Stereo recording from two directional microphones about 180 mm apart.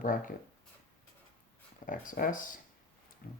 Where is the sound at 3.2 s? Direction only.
55° left (ahead or behind).